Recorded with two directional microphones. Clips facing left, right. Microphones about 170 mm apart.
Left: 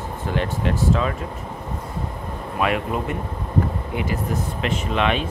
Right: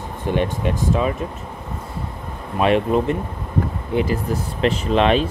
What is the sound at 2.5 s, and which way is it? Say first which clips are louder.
Speech: right 6 dB; 25° right (ahead or behind).